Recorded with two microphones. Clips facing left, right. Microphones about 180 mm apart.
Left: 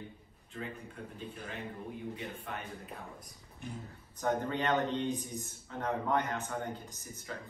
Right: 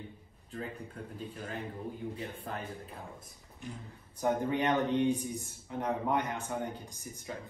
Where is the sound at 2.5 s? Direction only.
40° right (ahead or behind).